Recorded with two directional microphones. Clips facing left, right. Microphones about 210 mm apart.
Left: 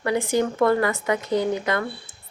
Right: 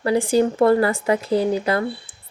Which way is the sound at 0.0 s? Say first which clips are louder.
Right 4 dB; 30° right (ahead or behind).